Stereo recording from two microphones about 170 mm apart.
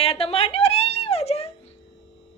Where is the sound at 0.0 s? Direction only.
35° left (ahead or behind).